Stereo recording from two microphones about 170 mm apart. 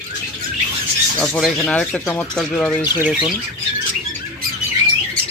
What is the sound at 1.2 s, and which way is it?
Speech, 5° left (ahead or behind).